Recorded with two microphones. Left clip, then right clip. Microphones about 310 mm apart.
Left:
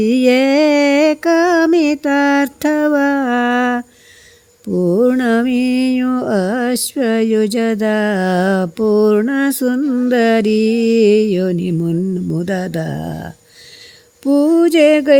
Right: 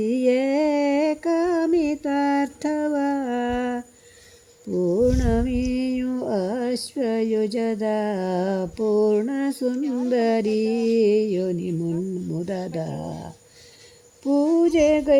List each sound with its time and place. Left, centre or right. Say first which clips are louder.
0.0 s a sound: left 8 dB; left
4.7 s mantra: left 7 dB; left
5.0 s music: left 8 dB; left
14.5 s music: left 8 dB; left